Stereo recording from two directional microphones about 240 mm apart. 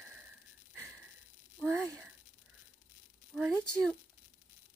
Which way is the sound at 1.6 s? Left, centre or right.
Centre.